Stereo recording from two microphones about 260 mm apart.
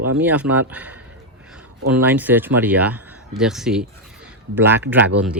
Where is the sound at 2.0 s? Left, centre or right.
Centre.